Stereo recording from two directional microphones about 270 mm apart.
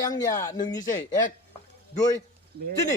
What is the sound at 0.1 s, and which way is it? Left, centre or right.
Speech, centre.